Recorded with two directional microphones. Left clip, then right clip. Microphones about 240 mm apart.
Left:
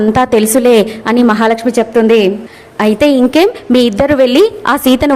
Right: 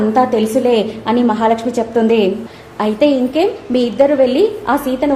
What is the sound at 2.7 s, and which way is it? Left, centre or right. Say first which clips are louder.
A woman's voice: left 4 dB; left.